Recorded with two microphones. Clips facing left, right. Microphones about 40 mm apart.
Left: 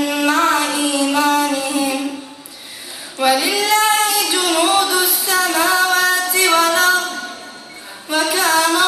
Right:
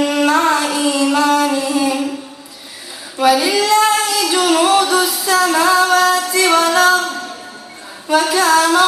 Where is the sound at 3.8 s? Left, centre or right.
Centre.